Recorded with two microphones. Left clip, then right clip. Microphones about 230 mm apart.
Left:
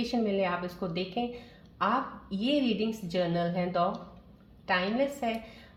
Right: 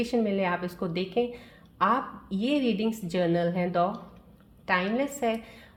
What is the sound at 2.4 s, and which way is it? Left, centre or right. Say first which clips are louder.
Speech: right 2 dB; right.